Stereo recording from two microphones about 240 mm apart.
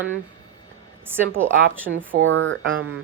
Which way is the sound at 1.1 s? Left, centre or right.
Centre.